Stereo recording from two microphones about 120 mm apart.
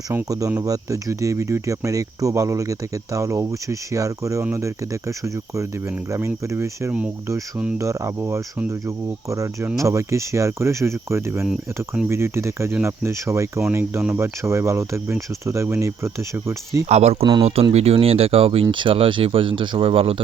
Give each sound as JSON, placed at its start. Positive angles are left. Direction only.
{"t": 0.1, "sound": "speech", "side_deg": -25}
{"t": 16.9, "sound": "speech", "side_deg": -65}
{"t": 17.4, "sound": "speech", "side_deg": -55}